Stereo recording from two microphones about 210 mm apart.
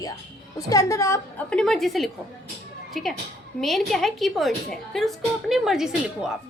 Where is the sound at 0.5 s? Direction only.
15° left (ahead or behind); by 6.3 s centre (ahead or behind).